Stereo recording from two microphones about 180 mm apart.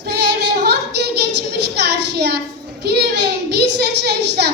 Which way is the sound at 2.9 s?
65° right (ahead or behind).